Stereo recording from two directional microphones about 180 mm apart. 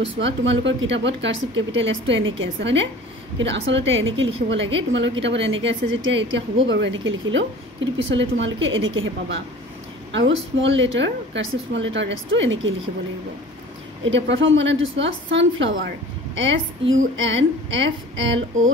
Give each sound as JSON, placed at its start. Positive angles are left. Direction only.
{"t": 0.0, "sound": "a woman's voice", "side_deg": -90}
{"t": 14.0, "sound": "a woman's voice", "side_deg": -90}